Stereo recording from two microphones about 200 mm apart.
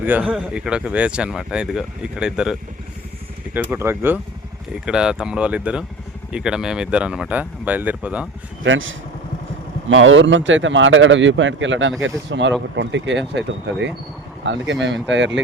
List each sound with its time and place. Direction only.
0.0 s speech: 10° right (ahead or behind)
8.6 s a man's voice: 75° right (ahead or behind)